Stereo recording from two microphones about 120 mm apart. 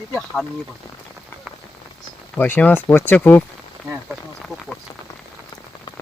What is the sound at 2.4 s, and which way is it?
Speech, 15° left (ahead or behind).